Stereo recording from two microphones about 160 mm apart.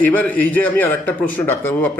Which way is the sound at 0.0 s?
10° left (ahead or behind).